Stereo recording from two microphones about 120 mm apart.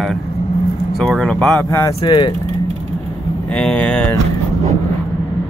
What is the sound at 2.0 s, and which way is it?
Speech, 40° left (ahead or behind).